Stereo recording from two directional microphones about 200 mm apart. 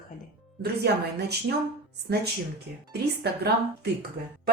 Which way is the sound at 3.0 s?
55° right (ahead or behind).